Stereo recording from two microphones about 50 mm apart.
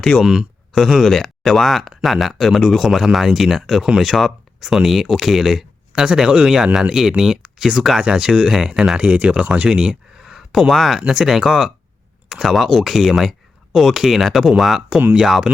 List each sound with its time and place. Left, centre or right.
0.2 s speech: centre
9.0 s speech: right; by 11.0 s centre
11.0 s speech: centre
14.8 s speech: centre